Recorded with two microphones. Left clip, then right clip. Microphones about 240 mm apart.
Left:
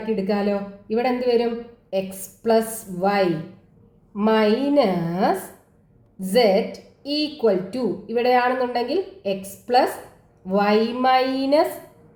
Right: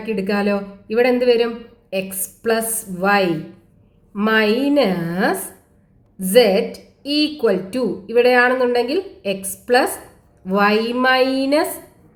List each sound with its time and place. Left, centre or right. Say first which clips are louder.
0.2 s speech: right 6 dB; right